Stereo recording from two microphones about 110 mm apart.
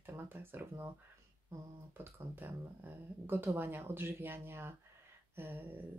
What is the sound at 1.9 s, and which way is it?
Speech, 20° right (ahead or behind).